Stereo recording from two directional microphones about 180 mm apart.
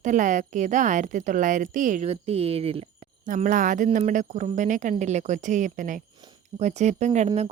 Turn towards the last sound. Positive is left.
turn(degrees=-40)  # may be behind; listen again after turning